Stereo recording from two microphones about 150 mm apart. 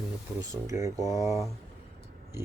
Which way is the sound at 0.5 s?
20° right (ahead or behind).